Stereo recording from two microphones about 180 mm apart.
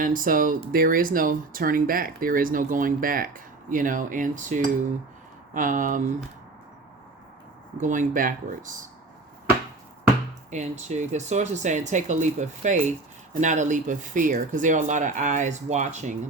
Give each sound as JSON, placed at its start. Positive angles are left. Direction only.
{"t": 0.0, "sound": "speech", "side_deg": -50}
{"t": 7.8, "sound": "speech", "side_deg": -45}
{"t": 10.5, "sound": "speech", "side_deg": -40}